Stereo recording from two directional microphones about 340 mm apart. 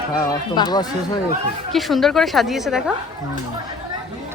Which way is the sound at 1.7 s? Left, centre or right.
Centre.